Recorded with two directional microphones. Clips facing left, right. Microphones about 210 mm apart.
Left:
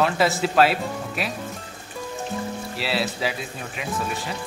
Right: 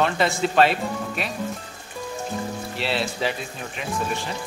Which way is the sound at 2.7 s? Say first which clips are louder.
Even; 5° left (ahead or behind).